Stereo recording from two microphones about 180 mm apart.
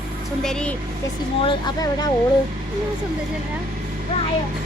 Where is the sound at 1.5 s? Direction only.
25° left (ahead or behind).